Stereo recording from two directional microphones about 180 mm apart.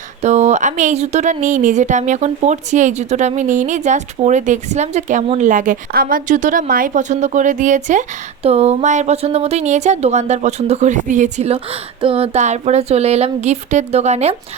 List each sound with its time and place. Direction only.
0.2 s a woman's voice: 40° right (ahead or behind)